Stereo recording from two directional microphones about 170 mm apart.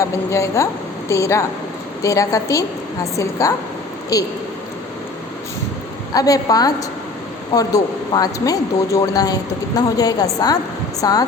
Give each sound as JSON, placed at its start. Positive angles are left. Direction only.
{"t": 0.0, "sound": "a woman's voice", "side_deg": 15}
{"t": 6.1, "sound": "speech", "side_deg": 20}